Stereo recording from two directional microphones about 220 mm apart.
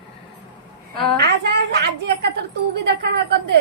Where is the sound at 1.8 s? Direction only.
50° right (ahead or behind).